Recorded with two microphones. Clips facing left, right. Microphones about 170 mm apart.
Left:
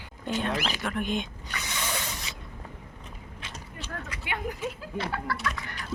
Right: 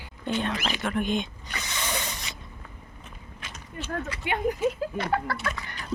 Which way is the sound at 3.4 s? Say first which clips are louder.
Right 5 dB; 30° left (ahead or behind).